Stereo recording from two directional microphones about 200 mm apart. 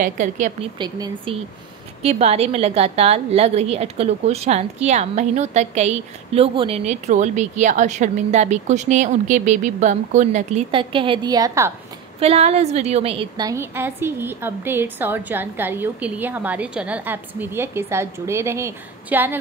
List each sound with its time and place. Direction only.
0.0 s a woman's voice: 40° right (ahead or behind)
0.7 s a woman's voice: 20° right (ahead or behind)
12.2 s a woman's voice: 30° right (ahead or behind); by 19.3 s 10° right (ahead or behind)